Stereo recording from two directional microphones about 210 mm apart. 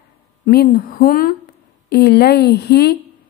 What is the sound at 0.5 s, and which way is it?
Speech, 45° left (ahead or behind).